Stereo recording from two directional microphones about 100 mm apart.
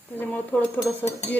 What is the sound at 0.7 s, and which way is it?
Dishes, 30° left (ahead or behind).